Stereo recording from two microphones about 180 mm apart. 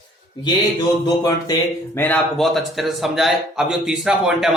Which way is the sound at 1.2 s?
20° left (ahead or behind).